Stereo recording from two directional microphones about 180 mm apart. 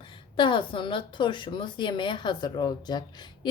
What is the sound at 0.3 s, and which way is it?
Speech, 25° left (ahead or behind).